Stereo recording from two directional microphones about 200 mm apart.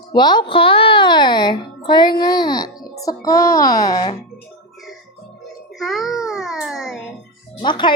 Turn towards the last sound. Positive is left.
turn(degrees=25)  # may be behind; listen again after turning